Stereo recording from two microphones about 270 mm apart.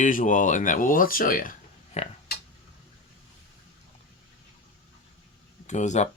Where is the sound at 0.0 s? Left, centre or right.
Left.